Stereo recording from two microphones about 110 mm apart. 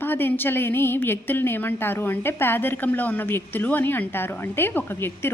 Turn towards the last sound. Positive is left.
turn(degrees=20)  # may be behind; listen again after turning